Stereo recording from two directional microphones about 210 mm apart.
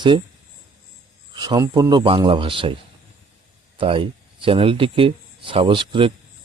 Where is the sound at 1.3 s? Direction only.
20° right (ahead or behind).